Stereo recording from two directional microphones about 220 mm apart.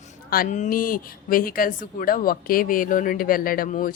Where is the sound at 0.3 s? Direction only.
35° left (ahead or behind).